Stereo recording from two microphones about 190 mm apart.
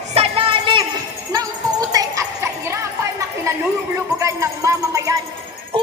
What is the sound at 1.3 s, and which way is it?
Music, 20° right (ahead or behind).